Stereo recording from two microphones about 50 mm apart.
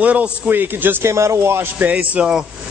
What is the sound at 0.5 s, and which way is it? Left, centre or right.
Speech, right.